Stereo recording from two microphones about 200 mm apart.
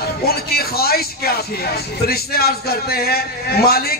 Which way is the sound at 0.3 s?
50° left (ahead or behind).